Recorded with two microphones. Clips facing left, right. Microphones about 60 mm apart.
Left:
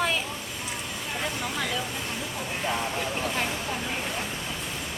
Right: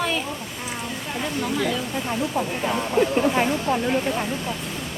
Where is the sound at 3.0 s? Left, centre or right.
Right.